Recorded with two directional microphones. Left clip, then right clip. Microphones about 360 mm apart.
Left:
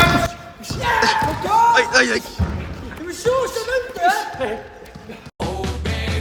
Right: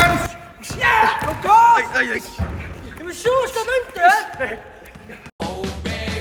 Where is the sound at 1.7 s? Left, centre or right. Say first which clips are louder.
Left 4 dB; centre.